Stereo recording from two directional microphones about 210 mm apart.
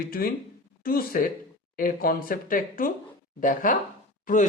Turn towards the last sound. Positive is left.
turn(degrees=40)  # may be behind; listen again after turning